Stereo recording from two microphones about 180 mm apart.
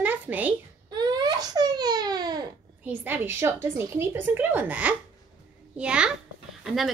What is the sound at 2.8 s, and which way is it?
A woman's voice, 10° right (ahead or behind).